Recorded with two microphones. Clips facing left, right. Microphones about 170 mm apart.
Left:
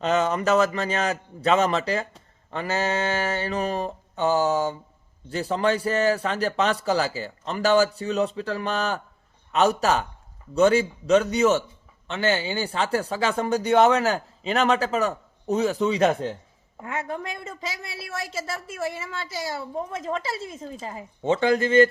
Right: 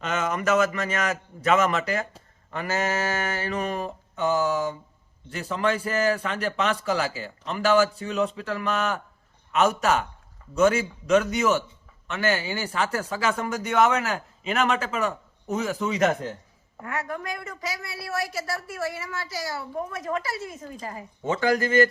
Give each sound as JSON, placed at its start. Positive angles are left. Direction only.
{"t": 0.0, "sound": "a woman's voice", "side_deg": 35}